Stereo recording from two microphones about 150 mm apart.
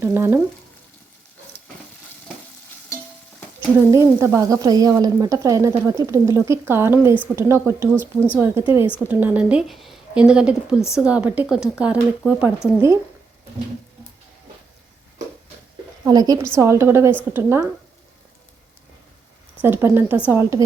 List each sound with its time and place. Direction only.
0.0 s a woman's voice: 15° right (ahead or behind)
3.8 s a woman's voice: 20° right (ahead or behind)
16.0 s a woman's voice: 25° right (ahead or behind)
19.6 s a woman's voice: 15° right (ahead or behind)